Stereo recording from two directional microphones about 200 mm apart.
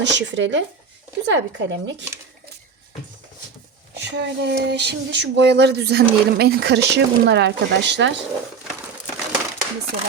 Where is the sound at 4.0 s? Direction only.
60° right (ahead or behind).